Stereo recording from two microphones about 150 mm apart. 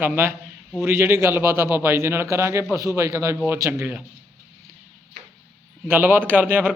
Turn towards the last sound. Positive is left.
turn(degrees=-10)  # may be behind; listen again after turning